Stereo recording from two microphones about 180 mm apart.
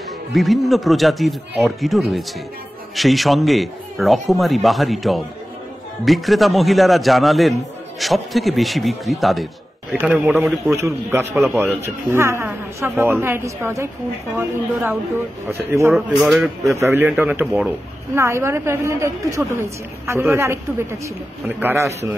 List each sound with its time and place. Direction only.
0.3 s a man's voice: centre (ahead or behind)
10.8 s speech: 15° right (ahead or behind)
15.9 s a man's voice: centre (ahead or behind)
16.7 s speech: 15° right (ahead or behind)